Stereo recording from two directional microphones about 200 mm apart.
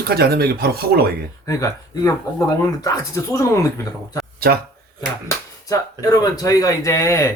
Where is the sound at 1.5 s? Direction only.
15° left (ahead or behind).